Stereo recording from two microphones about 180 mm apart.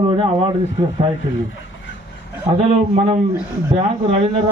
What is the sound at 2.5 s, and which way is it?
Speech, 35° right (ahead or behind).